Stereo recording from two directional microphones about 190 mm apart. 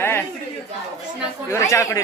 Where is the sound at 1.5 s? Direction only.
15° left (ahead or behind).